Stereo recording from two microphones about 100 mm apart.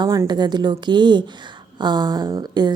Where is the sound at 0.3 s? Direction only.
45° right (ahead or behind).